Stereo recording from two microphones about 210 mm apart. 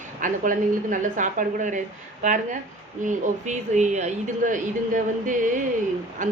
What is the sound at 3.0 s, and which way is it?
Speech, 35° right (ahead or behind).